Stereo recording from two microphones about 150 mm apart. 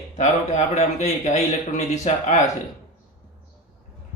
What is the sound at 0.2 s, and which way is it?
Speech, 50° left (ahead or behind).